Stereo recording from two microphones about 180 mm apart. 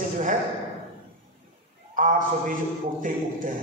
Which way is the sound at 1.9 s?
45° right (ahead or behind).